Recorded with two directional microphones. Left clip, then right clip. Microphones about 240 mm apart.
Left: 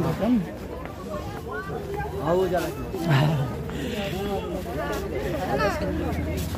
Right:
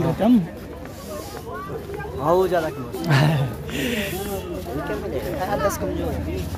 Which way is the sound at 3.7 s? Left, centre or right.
Right.